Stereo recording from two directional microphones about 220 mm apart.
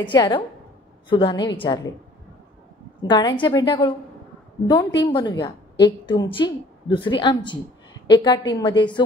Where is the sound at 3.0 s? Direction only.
20° left (ahead or behind).